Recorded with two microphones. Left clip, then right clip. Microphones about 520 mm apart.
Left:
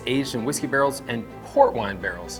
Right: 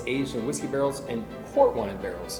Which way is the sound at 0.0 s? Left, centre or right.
Left.